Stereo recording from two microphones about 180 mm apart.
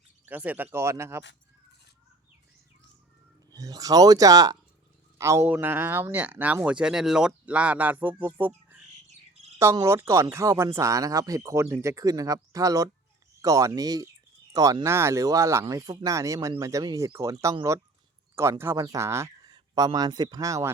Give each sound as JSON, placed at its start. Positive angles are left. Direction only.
{"t": 0.3, "sound": "speech", "side_deg": -10}
{"t": 3.5, "sound": "speech", "side_deg": -20}